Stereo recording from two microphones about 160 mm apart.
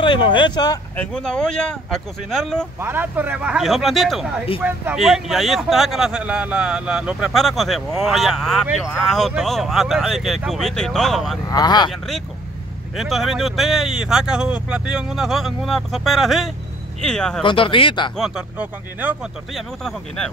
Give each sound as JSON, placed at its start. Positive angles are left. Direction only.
{"t": 0.0, "sound": "speech", "side_deg": 30}
{"t": 0.9, "sound": "speech", "side_deg": 5}
{"t": 2.8, "sound": "speech", "side_deg": -15}
{"t": 4.6, "sound": "speech", "side_deg": -10}
{"t": 4.9, "sound": "speech", "side_deg": 0}
{"t": 11.4, "sound": "speech", "side_deg": 25}
{"t": 12.9, "sound": "speech", "side_deg": 0}
{"t": 17.4, "sound": "speech", "side_deg": 30}
{"t": 18.1, "sound": "speech", "side_deg": -5}